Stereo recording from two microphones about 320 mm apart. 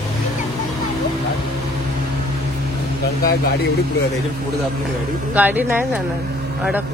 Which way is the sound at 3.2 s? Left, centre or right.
Left.